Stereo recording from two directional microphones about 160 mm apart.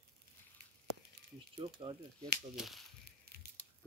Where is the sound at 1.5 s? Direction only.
30° right (ahead or behind).